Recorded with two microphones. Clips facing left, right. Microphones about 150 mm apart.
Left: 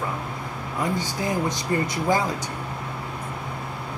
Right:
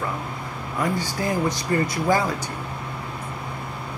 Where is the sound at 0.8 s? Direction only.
20° left (ahead or behind).